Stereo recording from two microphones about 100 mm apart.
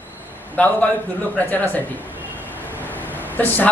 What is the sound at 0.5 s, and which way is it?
Speech, 15° left (ahead or behind).